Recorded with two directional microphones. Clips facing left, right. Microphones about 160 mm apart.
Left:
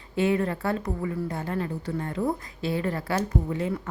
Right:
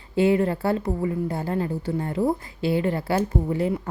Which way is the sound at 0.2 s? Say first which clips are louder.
Right 4 dB; 30° right (ahead or behind).